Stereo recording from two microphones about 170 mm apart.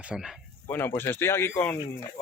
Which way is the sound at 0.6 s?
10° left (ahead or behind).